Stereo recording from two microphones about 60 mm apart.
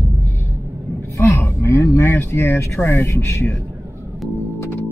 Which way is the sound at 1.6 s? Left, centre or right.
Left.